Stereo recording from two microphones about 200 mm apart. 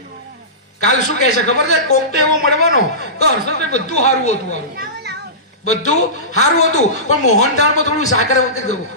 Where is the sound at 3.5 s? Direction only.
35° left (ahead or behind).